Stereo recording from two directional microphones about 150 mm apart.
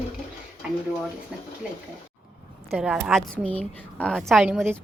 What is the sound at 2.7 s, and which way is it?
Speech, centre (ahead or behind).